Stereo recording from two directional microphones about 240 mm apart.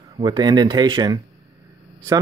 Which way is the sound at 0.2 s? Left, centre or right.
Centre.